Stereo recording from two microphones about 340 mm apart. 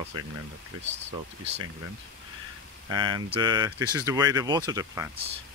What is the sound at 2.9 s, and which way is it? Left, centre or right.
Speech, centre.